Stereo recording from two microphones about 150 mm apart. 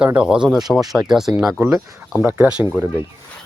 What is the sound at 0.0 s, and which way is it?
Speech, 5° right (ahead or behind).